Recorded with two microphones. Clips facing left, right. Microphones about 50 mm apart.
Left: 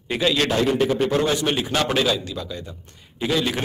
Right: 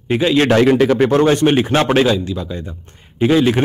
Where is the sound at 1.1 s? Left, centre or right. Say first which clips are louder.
Right 8 dB; right.